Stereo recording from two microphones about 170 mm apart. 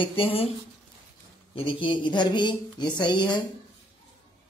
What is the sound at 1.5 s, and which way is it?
Speech, 30° left (ahead or behind).